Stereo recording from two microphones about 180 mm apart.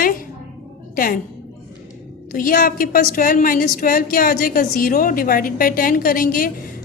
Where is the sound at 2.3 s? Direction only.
50° left (ahead or behind).